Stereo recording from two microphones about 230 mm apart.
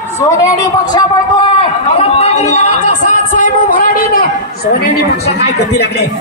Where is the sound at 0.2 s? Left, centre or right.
Centre; by 4.3 s left.